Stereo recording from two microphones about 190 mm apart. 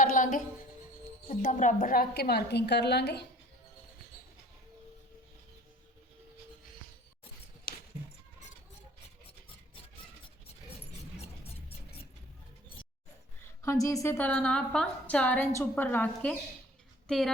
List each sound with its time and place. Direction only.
0.0 s music: 45° left (ahead or behind)
1.3 s a woman's voice: 40° left (ahead or behind); by 3.2 s 60° left (ahead or behind)
7.7 s clip-clop: 55° left (ahead or behind)
13.6 s a woman's voice: 15° left (ahead or behind)